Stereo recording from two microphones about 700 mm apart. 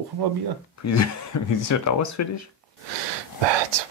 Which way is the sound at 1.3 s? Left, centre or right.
Left.